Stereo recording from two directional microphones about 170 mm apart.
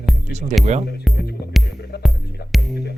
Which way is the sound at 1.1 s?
Centre (ahead or behind).